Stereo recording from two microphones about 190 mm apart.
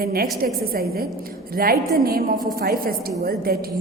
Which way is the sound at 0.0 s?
50° right (ahead or behind).